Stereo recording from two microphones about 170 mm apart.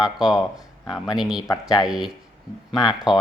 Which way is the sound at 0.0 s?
Centre (ahead or behind).